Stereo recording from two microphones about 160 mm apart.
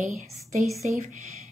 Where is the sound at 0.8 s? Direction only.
50° right (ahead or behind).